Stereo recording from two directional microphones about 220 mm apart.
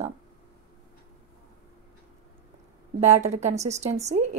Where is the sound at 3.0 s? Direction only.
30° right (ahead or behind).